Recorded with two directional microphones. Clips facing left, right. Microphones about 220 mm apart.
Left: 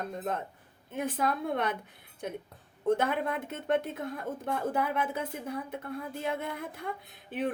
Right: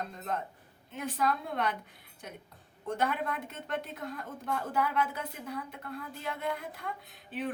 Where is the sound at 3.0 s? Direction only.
50° left (ahead or behind).